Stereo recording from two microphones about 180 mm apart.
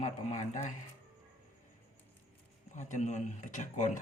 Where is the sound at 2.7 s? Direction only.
40° left (ahead or behind).